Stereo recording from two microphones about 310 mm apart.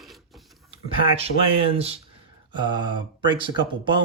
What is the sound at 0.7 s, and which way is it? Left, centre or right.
Speech, centre.